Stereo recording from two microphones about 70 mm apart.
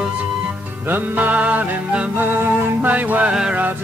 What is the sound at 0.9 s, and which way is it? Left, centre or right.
Music, right.